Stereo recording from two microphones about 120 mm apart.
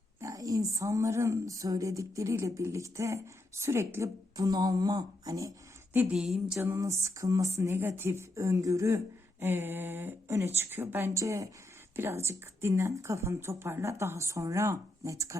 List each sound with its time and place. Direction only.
0.2 s a woman's voice: 30° right (ahead or behind)
6.1 s a sound: 5° right (ahead or behind)
6.6 s a woman's voice: 25° right (ahead or behind)